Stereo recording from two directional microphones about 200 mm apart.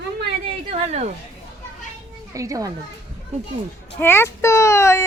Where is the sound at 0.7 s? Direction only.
35° right (ahead or behind).